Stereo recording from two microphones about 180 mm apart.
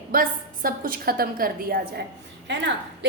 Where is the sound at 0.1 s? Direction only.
50° right (ahead or behind).